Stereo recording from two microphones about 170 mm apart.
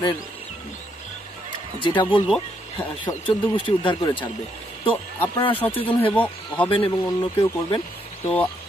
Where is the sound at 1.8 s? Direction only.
30° left (ahead or behind).